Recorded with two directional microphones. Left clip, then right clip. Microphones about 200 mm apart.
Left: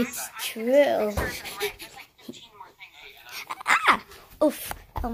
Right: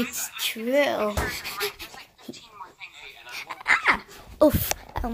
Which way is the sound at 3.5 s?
10° left (ahead or behind).